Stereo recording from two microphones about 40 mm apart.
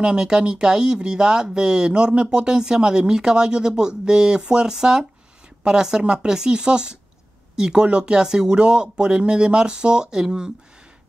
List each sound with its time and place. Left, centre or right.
0.0 s speech: right